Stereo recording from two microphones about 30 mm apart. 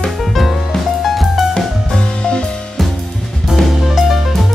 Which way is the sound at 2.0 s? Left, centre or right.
Left.